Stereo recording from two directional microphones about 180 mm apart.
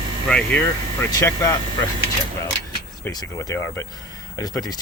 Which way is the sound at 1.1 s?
20° left (ahead or behind).